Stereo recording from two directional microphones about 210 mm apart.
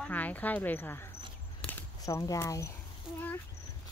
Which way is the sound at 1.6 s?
10° left (ahead or behind).